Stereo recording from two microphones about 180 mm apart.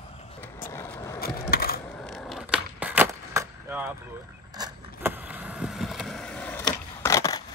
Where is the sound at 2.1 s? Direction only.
Centre (ahead or behind).